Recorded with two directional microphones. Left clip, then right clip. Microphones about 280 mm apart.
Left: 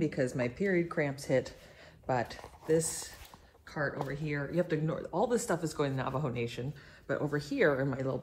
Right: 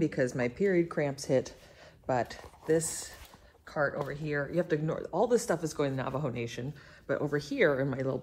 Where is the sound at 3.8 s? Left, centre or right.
Right.